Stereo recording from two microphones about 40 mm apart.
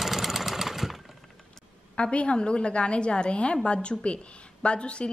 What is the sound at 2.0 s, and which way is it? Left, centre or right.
A woman's voice, left.